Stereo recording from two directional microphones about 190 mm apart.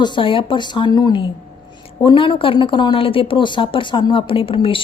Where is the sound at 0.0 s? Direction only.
25° left (ahead or behind).